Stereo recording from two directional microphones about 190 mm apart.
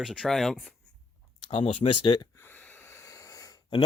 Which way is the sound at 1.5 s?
30° left (ahead or behind).